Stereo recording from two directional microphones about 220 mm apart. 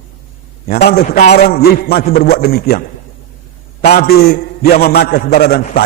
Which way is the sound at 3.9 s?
45° left (ahead or behind).